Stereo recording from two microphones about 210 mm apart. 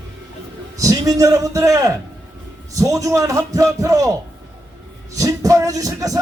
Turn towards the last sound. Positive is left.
turn(degrees=-15)  # may be behind; listen again after turning